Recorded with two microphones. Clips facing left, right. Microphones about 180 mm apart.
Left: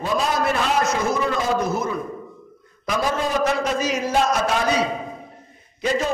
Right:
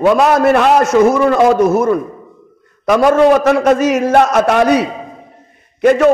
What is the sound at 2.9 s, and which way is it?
A man's voice, 65° right (ahead or behind).